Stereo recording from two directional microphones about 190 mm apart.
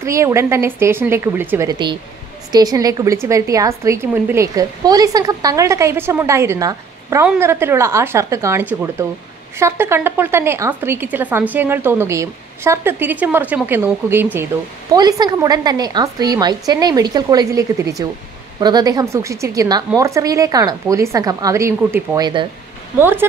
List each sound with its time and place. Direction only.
0.0 s a woman's voice: 15° right (ahead or behind)
22.9 s speech: 10° right (ahead or behind)